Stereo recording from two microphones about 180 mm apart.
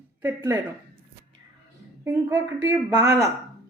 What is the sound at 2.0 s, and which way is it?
A woman's voice, 15° right (ahead or behind).